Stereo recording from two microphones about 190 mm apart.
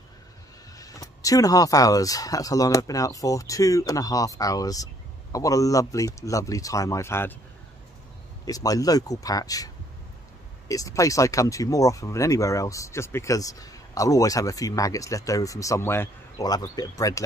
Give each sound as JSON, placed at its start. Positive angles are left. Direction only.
{"t": 0.7, "sound": "speech", "side_deg": 20}
{"t": 8.5, "sound": "speech", "side_deg": 20}
{"t": 10.7, "sound": "speech", "side_deg": 15}